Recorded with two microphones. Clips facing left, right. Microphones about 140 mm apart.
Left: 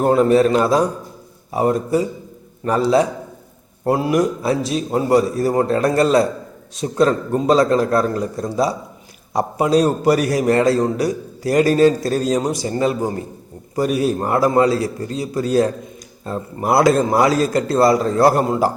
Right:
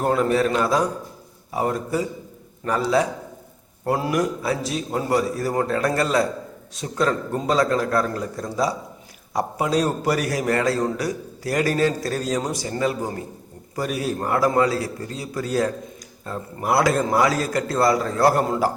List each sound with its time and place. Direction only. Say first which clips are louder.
0.0 s a man's voice: left 6 dB; 25° left (ahead or behind)